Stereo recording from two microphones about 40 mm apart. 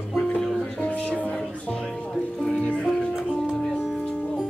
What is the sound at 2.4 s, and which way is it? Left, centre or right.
Music, left.